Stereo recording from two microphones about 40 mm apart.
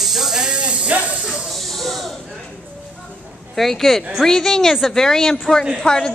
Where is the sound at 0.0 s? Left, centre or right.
Centre.